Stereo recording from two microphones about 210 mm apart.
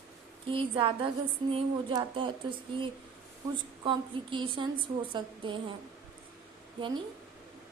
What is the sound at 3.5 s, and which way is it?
Speech, 20° right (ahead or behind).